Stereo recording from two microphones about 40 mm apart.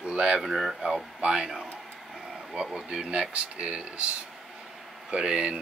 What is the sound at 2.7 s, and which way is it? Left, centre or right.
Speech, right.